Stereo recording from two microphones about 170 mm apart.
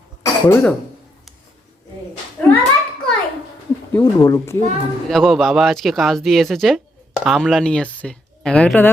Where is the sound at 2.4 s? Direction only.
10° left (ahead or behind).